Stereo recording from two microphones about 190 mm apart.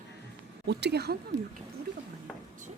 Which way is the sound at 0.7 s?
60° right (ahead or behind).